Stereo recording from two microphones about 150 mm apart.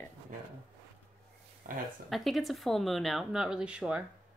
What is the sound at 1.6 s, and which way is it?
Speech, 70° right (ahead or behind).